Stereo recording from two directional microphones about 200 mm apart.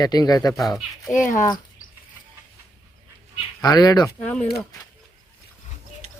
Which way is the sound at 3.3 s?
20° left (ahead or behind).